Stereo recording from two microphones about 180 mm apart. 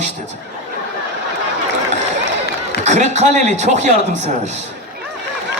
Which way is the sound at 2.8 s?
40° right (ahead or behind).